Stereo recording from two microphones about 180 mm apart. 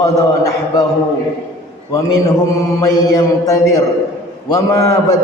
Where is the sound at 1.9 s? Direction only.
20° left (ahead or behind).